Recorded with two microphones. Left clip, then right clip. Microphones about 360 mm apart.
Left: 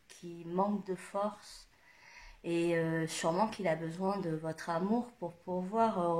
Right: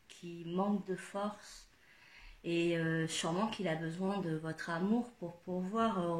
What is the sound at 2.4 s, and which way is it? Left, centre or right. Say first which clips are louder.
Speech: left 2 dB; centre.